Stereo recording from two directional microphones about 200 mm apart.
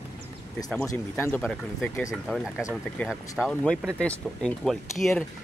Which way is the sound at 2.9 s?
Centre (ahead or behind).